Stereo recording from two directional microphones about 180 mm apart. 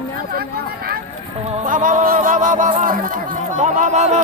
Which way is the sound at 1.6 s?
45° right (ahead or behind).